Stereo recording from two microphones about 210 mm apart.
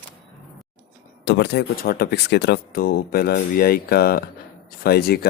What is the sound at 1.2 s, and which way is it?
Speech, 55° left (ahead or behind).